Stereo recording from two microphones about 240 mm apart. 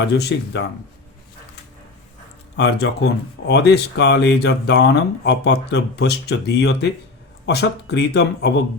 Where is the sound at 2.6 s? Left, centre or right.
Left.